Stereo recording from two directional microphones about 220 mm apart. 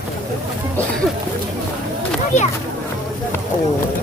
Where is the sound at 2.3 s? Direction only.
30° left (ahead or behind).